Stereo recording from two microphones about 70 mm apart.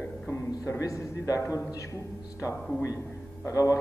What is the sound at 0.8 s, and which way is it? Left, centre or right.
Speech, left.